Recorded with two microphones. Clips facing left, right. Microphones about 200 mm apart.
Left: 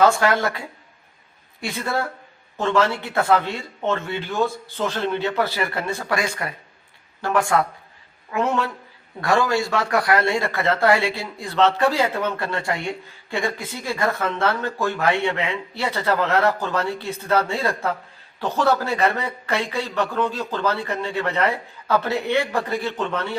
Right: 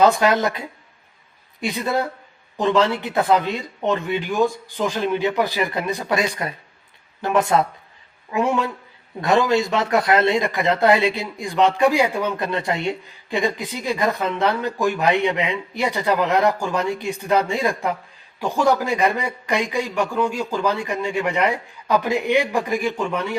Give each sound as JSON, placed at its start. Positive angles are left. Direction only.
{"t": 0.0, "sound": "speech", "side_deg": -20}
{"t": 9.2, "sound": "speech", "side_deg": -20}